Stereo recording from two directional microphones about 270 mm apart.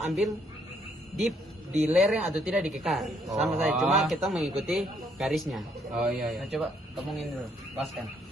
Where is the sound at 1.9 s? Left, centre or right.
Centre.